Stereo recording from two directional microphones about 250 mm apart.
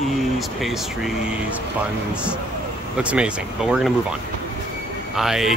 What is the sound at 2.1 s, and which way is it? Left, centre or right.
Speech, centre.